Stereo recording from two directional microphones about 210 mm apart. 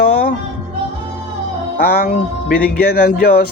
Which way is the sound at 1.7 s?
45° left (ahead or behind).